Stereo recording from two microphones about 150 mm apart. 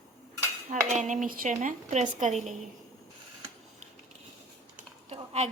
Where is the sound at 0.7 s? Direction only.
55° right (ahead or behind).